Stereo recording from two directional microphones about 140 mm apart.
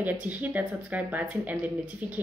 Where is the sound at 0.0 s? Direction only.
10° right (ahead or behind).